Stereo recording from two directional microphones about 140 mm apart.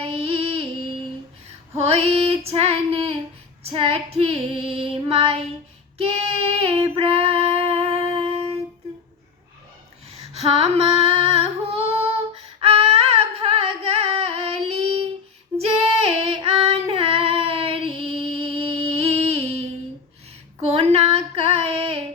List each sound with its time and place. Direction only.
0.0 s music: 45° right (ahead or behind)
1.8 s female singing: 45° right (ahead or behind)
6.0 s child singing: 45° right (ahead or behind)
10.4 s female singing: 45° right (ahead or behind)
20.7 s female singing: 45° right (ahead or behind)